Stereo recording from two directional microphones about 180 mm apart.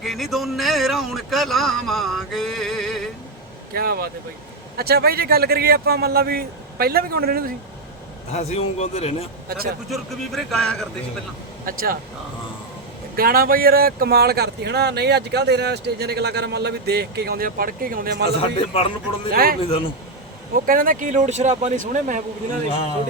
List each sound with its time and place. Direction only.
0.0 s a man's voice: centre (ahead or behind)
3.7 s speech: 60° right (ahead or behind)
8.3 s speech: 35° left (ahead or behind)
9.9 s a man's voice: centre (ahead or behind)
11.6 s speech: 55° right (ahead or behind)
13.1 s speech: 55° right (ahead or behind)
18.7 s speech: 35° left (ahead or behind)
19.3 s speech: 55° right (ahead or behind)
19.6 s speech: 30° left (ahead or behind)
20.7 s speech: 50° right (ahead or behind)